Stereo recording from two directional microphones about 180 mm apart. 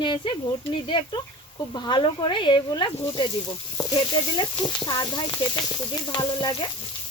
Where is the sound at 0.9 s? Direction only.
25° left (ahead or behind).